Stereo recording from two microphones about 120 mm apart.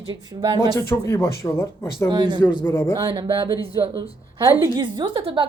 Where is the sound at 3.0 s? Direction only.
40° right (ahead or behind).